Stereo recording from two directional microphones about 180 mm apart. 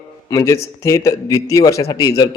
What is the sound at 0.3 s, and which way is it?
Speech, 15° left (ahead or behind).